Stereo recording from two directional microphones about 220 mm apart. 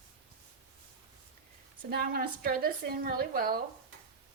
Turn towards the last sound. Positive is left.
turn(degrees=-40)  # may be behind; listen again after turning